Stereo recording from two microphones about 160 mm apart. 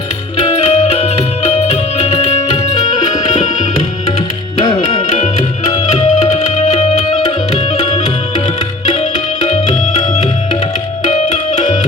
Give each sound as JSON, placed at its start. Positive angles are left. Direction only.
{"t": 0.3, "sound": "music", "side_deg": 40}
{"t": 4.8, "sound": "tabla", "side_deg": 40}
{"t": 9.0, "sound": "music", "side_deg": 45}